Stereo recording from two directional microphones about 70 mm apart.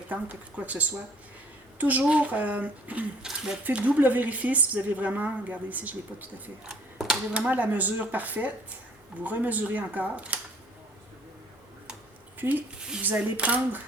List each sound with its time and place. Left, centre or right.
0.1 s speech: right
3.2 s speech: centre
3.6 s speech: centre
6.7 s a sound: centre
7.3 s speech: right
12.4 s speech: right